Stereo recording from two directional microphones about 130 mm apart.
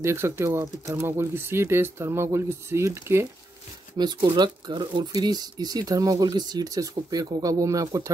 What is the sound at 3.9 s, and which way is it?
Speech, 35° right (ahead or behind).